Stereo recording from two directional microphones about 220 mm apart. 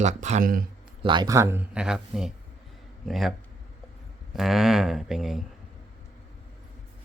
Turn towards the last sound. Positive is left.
turn(degrees=0)  # may be behind; listen again after turning